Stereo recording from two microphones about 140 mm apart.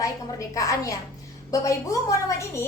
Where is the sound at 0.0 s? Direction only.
25° left (ahead or behind).